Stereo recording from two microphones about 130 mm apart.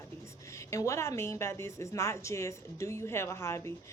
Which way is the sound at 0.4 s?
25° left (ahead or behind).